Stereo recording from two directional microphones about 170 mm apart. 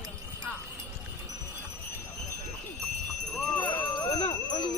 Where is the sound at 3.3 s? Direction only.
10° left (ahead or behind).